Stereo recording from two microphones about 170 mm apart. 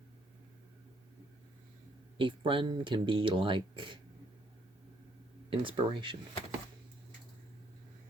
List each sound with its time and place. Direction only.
2.1 s speech: 30° right (ahead or behind)
5.5 s speech: 30° right (ahead or behind)